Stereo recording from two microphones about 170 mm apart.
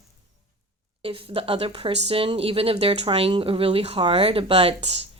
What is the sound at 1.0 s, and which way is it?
Speech, 35° right (ahead or behind).